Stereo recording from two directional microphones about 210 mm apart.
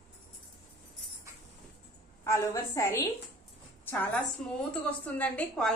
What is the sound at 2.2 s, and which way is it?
A woman's voice, 15° left (ahead or behind).